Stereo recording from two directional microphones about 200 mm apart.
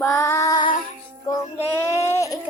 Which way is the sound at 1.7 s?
15° left (ahead or behind).